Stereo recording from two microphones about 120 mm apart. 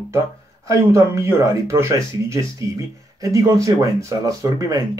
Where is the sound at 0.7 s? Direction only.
25° right (ahead or behind).